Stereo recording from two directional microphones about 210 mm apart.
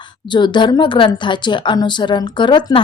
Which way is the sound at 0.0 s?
20° left (ahead or behind).